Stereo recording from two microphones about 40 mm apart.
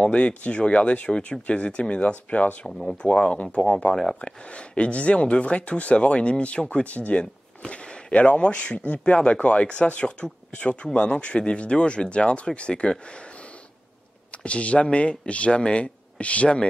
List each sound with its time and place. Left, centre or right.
0.0 s speech: left
3.9 s speech: centre
4.2 s speech: left
14.3 s speech: left